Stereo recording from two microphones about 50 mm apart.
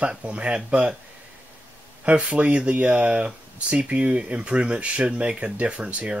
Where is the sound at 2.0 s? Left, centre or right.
Right.